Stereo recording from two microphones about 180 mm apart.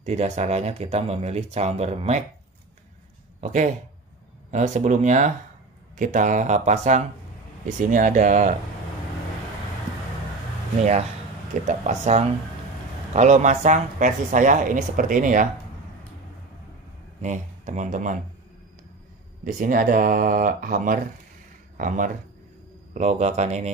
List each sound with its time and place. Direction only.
0.0 s speech: 40° right (ahead or behind)
3.3 s a woman's voice: 40° right (ahead or behind)
11.6 s a woman's voice: 40° right (ahead or behind)
17.2 s speech: 40° right (ahead or behind)
19.4 s a woman's voice: 50° right (ahead or behind)